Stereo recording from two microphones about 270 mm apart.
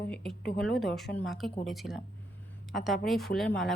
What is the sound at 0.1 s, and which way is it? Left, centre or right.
Speech, centre.